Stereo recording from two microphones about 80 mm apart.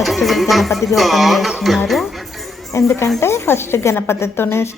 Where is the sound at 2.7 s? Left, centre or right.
Left.